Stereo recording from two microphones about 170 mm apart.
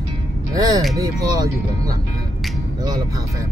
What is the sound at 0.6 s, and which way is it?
Speech, 20° right (ahead or behind).